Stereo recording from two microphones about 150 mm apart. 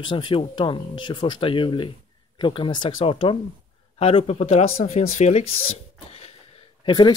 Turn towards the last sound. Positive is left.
turn(degrees=30)  # may be behind; listen again after turning